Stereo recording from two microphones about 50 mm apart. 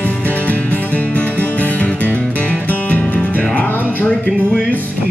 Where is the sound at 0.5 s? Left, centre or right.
Left.